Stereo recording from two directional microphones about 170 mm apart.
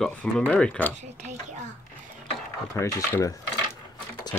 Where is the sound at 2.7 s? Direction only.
15° left (ahead or behind).